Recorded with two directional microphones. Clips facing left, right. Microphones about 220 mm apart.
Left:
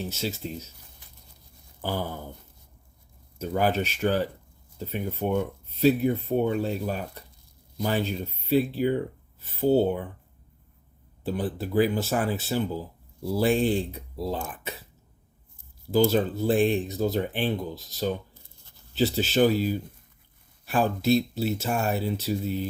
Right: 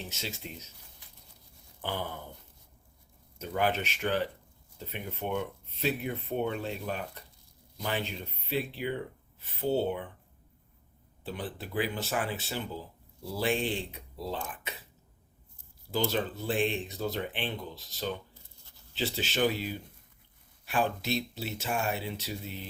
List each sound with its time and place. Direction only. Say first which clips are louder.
0.2 s speech: left 9 dB; 40° left (ahead or behind)
1.8 s speech: left 5 dB; 40° left (ahead or behind)
3.3 s speech: left 5 dB; 40° left (ahead or behind)
11.2 s speech: left 9 dB; 40° left (ahead or behind)
15.9 s speech: left 9 dB; 40° left (ahead or behind)